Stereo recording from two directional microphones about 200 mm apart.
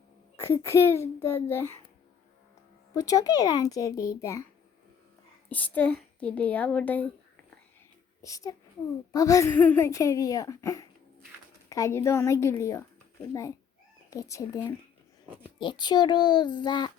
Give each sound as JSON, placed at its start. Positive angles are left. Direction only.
{"t": 0.4, "sound": "speech", "side_deg": 15}
{"t": 2.9, "sound": "speech", "side_deg": 15}
{"t": 5.5, "sound": "speech", "side_deg": 10}
{"t": 8.2, "sound": "speech", "side_deg": 15}
{"t": 14.1, "sound": "speech", "side_deg": 15}
{"t": 15.3, "sound": "speech", "side_deg": -10}
{"t": 15.5, "sound": "a child's voice", "side_deg": 20}